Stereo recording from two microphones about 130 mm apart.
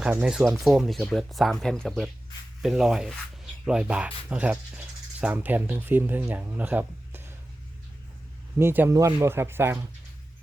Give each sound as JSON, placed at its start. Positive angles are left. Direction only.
{"t": 0.1, "sound": "speech", "side_deg": -10}
{"t": 8.5, "sound": "speech", "side_deg": -15}